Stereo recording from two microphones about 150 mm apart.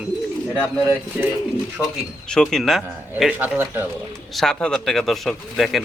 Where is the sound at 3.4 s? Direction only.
15° right (ahead or behind).